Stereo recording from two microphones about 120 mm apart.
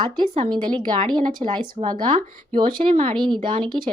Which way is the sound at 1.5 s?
40° right (ahead or behind).